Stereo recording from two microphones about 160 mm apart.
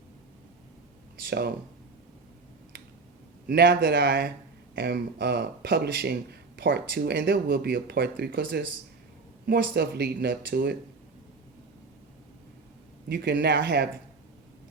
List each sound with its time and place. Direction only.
1.3 s speech: 80° right
3.4 s speech: 90° right
13.1 s speech: 90° right